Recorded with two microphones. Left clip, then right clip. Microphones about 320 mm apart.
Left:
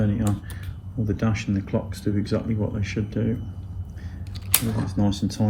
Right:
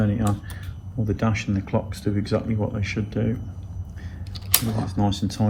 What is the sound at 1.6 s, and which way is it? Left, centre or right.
Speech, centre.